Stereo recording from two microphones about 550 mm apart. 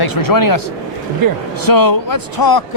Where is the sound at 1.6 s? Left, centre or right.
Left.